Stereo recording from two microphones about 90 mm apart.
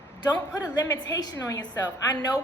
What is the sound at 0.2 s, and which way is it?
A woman's voice, 50° left (ahead or behind).